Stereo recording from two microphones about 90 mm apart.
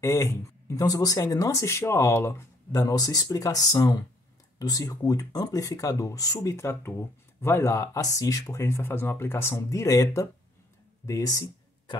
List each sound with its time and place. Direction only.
0.0 s speech: 35° left (ahead or behind)
6.5 s speech: 30° left (ahead or behind)